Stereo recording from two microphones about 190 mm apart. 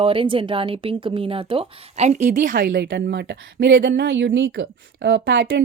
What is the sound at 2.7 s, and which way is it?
Speech, 70° right (ahead or behind).